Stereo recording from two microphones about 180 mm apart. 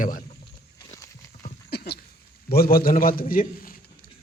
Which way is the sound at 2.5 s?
55° left (ahead or behind).